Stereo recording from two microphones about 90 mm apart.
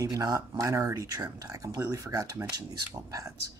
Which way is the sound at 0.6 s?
35° right (ahead or behind).